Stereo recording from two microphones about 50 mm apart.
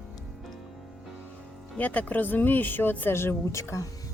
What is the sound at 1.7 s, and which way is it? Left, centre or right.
Speech, left.